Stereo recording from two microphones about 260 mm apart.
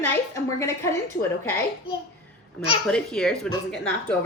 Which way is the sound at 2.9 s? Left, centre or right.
Centre.